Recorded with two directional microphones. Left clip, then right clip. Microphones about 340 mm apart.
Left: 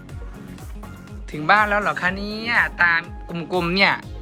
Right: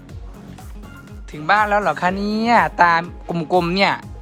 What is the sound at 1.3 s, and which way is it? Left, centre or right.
Speech, centre.